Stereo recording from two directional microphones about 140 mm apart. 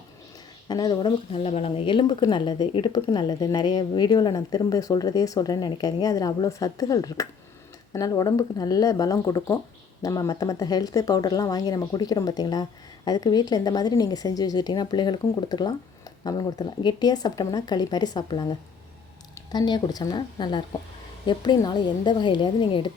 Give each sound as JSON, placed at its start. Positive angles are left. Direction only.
{"t": 0.7, "sound": "speech", "side_deg": 30}
{"t": 1.3, "sound": "a woman's voice", "side_deg": 45}